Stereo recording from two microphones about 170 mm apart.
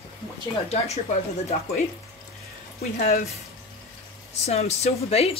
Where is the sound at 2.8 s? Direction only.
40° left (ahead or behind).